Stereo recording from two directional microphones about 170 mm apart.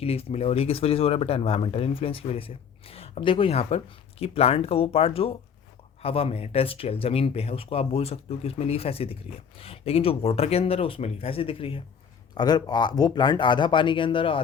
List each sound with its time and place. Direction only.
0.0 s speech: 35° left (ahead or behind)